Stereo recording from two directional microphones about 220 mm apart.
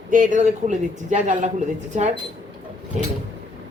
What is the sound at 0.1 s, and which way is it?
Speech, 35° right (ahead or behind).